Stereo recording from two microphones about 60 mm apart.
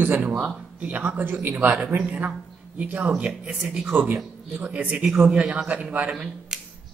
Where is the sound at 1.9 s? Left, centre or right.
Right.